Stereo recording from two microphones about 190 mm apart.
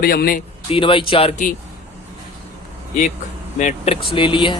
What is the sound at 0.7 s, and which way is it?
Speech, 25° left (ahead or behind).